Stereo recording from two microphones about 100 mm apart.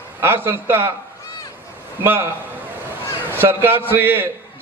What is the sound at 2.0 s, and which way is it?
A man's voice, 20° right (ahead or behind).